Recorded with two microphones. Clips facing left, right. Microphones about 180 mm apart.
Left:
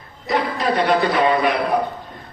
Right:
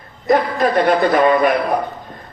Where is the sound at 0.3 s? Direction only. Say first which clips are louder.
Right 5 dB; 50° right (ahead or behind).